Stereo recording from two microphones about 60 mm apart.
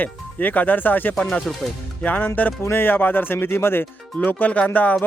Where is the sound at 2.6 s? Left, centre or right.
Left.